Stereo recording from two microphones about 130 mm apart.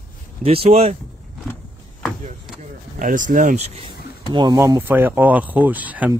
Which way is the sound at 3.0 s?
80° right.